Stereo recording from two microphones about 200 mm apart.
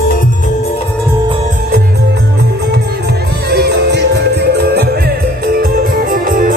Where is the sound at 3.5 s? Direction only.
55° right (ahead or behind).